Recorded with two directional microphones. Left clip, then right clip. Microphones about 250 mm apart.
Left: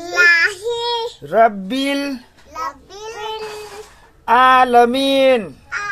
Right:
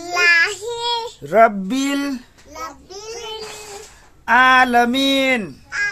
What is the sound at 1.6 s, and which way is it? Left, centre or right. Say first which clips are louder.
Speech: left 1 dB; centre.